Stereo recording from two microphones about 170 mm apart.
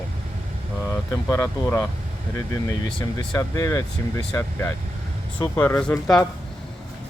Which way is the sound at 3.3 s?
15° left (ahead or behind).